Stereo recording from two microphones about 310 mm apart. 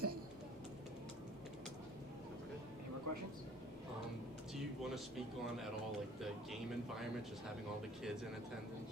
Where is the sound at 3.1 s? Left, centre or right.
Right.